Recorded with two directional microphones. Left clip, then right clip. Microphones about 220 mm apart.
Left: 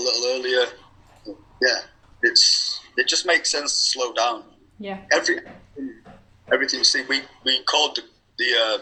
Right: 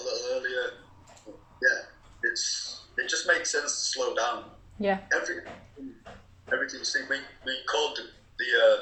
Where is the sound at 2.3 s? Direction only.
60° left (ahead or behind).